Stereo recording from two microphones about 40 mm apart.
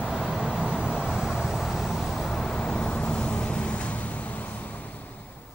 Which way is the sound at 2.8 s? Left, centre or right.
Left.